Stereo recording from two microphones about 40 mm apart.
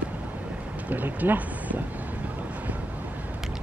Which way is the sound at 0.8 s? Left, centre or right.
Right.